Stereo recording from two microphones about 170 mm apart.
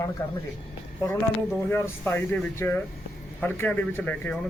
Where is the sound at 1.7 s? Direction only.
15° left (ahead or behind).